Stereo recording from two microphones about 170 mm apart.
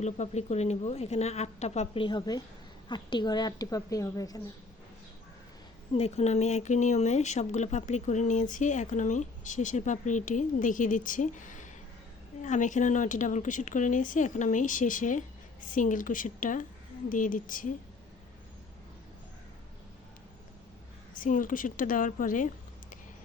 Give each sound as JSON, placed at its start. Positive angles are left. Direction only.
{"t": 0.0, "sound": "a woman's voice", "side_deg": 40}
{"t": 5.9, "sound": "speech", "side_deg": 40}
{"t": 21.2, "sound": "speech", "side_deg": 50}